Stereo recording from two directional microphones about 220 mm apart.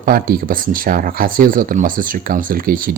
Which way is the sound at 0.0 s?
40° right (ahead or behind).